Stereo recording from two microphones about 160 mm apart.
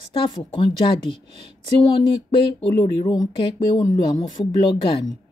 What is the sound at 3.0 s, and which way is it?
Speech, 25° left (ahead or behind).